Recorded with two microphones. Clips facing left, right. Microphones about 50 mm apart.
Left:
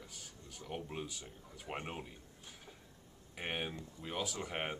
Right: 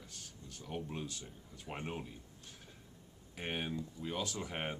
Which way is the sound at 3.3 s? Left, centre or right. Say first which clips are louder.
Right 1 dB; centre.